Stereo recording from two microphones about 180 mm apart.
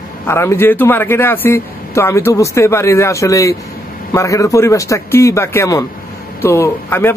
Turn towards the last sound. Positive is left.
turn(degrees=15)  # may be behind; listen again after turning